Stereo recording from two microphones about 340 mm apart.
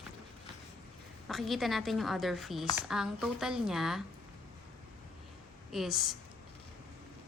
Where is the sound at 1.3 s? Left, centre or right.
Centre.